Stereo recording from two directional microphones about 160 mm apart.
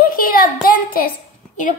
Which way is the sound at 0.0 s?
65° left (ahead or behind).